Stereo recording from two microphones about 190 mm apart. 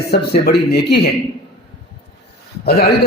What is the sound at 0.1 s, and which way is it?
Speech, 55° left (ahead or behind).